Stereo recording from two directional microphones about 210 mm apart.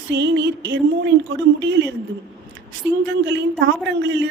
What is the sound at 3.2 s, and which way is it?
A man's voice, 60° right (ahead or behind).